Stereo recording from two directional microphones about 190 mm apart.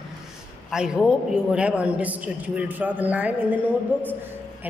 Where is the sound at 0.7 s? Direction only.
5° right (ahead or behind).